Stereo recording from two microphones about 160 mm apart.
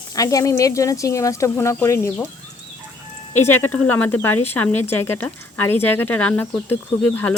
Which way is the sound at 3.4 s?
15° left (ahead or behind).